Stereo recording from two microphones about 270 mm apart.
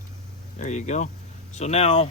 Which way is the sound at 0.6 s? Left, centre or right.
Left.